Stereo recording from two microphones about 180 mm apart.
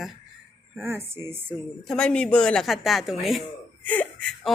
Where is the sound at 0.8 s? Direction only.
15° right (ahead or behind).